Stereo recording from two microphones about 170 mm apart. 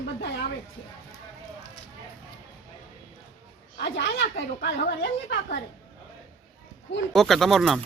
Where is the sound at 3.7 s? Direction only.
85° left.